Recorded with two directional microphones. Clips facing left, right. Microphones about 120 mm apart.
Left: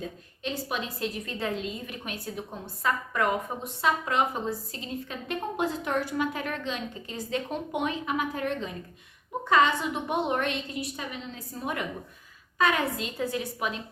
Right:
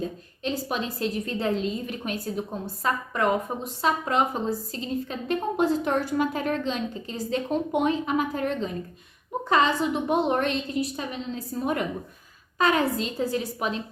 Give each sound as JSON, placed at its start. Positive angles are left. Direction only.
{"t": 0.4, "sound": "a woman's voice", "side_deg": -35}